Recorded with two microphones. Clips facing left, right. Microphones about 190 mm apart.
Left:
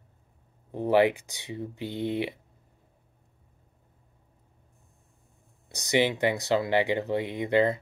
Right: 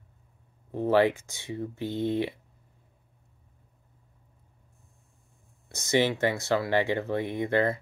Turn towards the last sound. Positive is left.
turn(degrees=15)  # may be behind; listen again after turning